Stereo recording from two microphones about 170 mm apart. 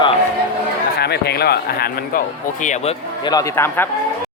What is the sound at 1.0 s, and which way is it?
Speech, 70° left (ahead or behind).